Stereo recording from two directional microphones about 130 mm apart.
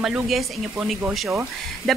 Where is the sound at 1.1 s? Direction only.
15° right (ahead or behind).